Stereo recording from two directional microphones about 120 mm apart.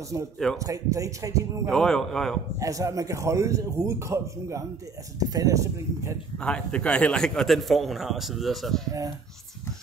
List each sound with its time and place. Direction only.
0.1 s a man's voice: 30° right (ahead or behind)
1.7 s a man's voice: 5° left (ahead or behind)
2.6 s a man's voice: 25° right (ahead or behind)
6.3 s a man's voice: 10° left (ahead or behind)